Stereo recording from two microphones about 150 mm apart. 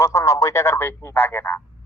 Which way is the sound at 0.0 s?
20° left (ahead or behind).